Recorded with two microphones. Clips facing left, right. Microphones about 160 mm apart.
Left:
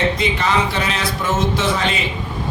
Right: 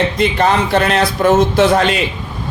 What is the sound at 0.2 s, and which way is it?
A man's voice, 55° right (ahead or behind).